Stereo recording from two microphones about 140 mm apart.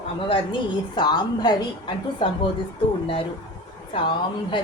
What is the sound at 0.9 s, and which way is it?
A woman's voice, 30° left (ahead or behind).